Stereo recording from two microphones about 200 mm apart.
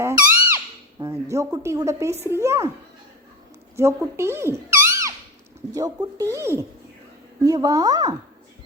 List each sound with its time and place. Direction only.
0.0 s squeak: 10° right (ahead or behind)
2.2 s speech: 15° right (ahead or behind)
3.8 s speech: 15° right (ahead or behind)